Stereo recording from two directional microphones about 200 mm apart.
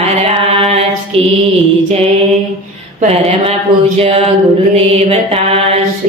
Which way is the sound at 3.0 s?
30° right (ahead or behind).